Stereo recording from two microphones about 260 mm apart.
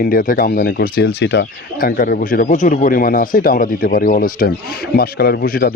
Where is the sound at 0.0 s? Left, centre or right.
Left.